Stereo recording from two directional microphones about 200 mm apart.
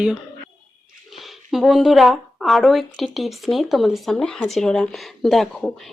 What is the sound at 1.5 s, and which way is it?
A woman's voice, centre (ahead or behind).